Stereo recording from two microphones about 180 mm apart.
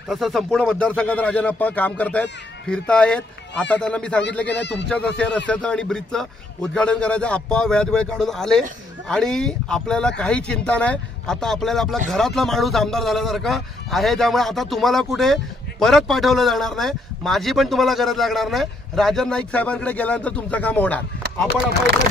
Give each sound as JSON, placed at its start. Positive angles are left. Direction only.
{"t": 0.1, "sound": "speech", "side_deg": 0}
{"t": 4.5, "sound": "speech", "side_deg": 75}
{"t": 4.8, "sound": "speech", "side_deg": 5}